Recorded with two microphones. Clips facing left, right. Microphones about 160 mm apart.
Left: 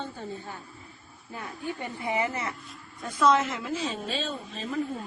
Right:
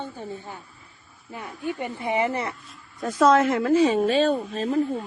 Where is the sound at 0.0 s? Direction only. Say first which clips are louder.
Right 2 dB; 15° right (ahead or behind).